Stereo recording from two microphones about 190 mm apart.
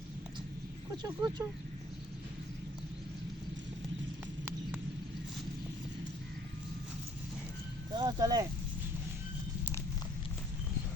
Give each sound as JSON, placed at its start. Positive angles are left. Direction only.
{"t": 1.0, "sound": "speech", "side_deg": -20}
{"t": 7.9, "sound": "speech", "side_deg": -20}